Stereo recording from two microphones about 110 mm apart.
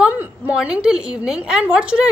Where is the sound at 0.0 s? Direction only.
15° right (ahead or behind).